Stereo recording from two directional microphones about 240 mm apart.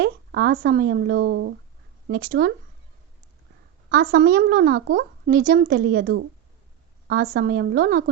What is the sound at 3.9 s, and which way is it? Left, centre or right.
A woman's voice, right.